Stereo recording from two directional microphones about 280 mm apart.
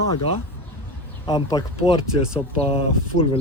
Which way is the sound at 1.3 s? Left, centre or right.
Centre.